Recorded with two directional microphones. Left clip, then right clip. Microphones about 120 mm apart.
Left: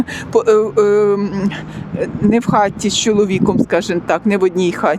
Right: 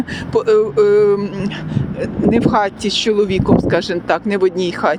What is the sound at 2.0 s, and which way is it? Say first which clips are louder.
Speech: even; 50° left (ahead or behind).